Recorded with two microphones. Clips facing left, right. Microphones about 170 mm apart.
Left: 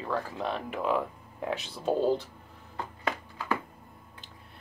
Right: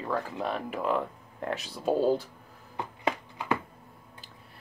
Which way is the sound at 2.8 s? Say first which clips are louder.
Right 2 dB; 20° right (ahead or behind).